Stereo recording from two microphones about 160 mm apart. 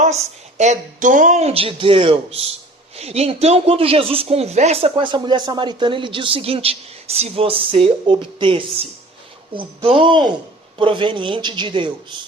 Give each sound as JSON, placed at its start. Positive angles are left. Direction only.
{"t": 0.0, "sound": "a woman's voice", "side_deg": -45}